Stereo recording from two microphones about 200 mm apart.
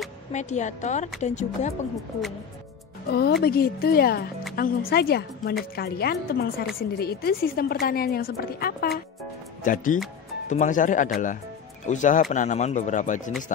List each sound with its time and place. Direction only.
0.3 s speech: 35° left (ahead or behind)
3.1 s a woman's voice: 55° left (ahead or behind)